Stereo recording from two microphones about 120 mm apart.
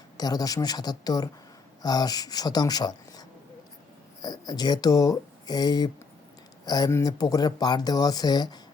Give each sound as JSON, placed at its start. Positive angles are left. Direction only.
{"t": 0.2, "sound": "speech", "side_deg": 30}